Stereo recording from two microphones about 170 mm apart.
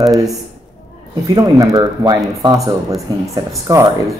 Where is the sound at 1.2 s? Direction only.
20° right (ahead or behind).